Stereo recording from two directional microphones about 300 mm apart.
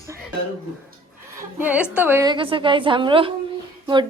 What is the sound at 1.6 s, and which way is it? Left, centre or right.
A woman's voice, centre.